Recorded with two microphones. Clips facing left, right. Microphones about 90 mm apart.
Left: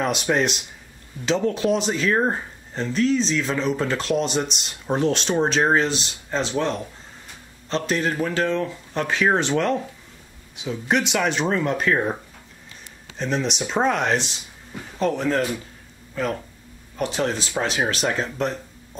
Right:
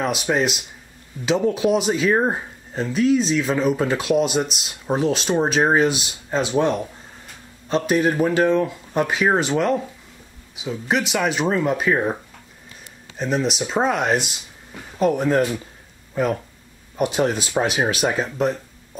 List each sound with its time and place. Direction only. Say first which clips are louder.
0.0 s speech: right 1 dB; centre (ahead or behind)
13.2 s speech: right 2 dB; 5° right (ahead or behind)